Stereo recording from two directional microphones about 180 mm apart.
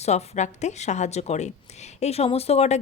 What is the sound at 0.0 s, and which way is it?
A woman's voice, 40° left (ahead or behind).